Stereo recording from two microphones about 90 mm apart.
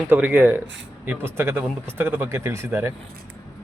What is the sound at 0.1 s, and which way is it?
Speech, 20° right (ahead or behind).